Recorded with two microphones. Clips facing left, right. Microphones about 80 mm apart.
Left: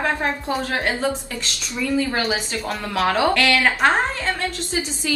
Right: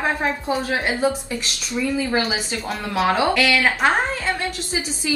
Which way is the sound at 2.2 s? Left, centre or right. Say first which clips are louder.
Even; centre.